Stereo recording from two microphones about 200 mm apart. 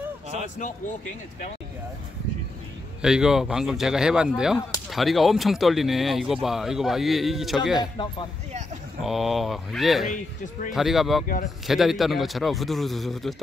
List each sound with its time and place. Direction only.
3.0 s speech: 5° right (ahead or behind)
7.8 s speech: 25° left (ahead or behind)
9.0 s speech: centre (ahead or behind)
10.0 s a man's voice: 40° left (ahead or behind)
10.7 s speech: centre (ahead or behind)